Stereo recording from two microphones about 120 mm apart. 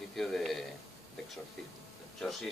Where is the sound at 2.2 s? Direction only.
Centre (ahead or behind).